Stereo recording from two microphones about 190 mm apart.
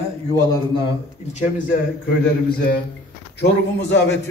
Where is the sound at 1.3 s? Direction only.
40° left (ahead or behind).